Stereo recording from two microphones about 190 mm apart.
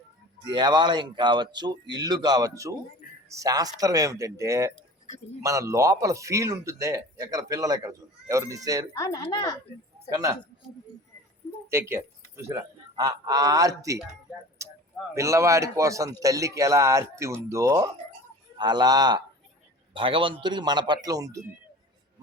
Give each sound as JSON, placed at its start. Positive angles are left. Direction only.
{"t": 0.4, "sound": "a man's voice", "side_deg": -20}
{"t": 9.0, "sound": "speech", "side_deg": 20}
{"t": 10.1, "sound": "a man's voice", "side_deg": -15}
{"t": 11.7, "sound": "speech", "side_deg": -15}
{"t": 14.6, "sound": "a sound", "side_deg": -15}
{"t": 15.1, "sound": "a man's voice", "side_deg": -15}